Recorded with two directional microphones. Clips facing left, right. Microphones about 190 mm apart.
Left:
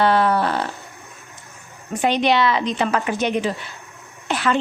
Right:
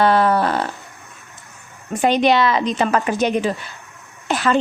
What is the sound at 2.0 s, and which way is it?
A woman's voice, 45° right (ahead or behind).